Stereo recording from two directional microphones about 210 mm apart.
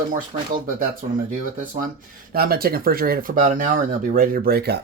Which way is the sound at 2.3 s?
45° right (ahead or behind).